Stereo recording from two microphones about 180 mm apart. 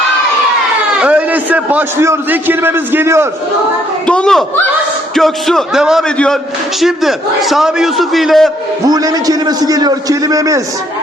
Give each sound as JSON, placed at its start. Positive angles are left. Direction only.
{"t": 0.9, "sound": "a man's voice", "side_deg": -5}
{"t": 4.0, "sound": "a man's voice", "side_deg": 5}
{"t": 8.9, "sound": "a man's voice", "side_deg": -20}